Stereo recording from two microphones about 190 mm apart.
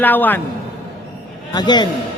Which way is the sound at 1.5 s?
25° left (ahead or behind).